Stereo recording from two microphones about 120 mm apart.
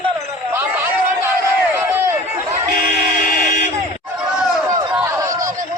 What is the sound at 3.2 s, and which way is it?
Buzzer, 90° left.